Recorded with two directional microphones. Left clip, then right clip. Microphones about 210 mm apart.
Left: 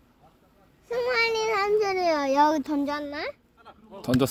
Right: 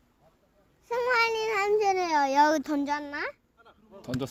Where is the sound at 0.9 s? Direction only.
30° right (ahead or behind).